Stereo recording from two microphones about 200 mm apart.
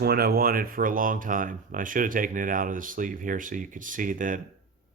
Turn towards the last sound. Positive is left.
turn(degrees=-40)  # may be behind; listen again after turning